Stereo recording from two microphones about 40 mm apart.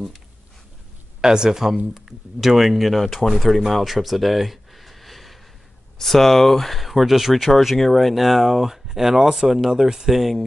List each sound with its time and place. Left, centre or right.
1.2 s speech: centre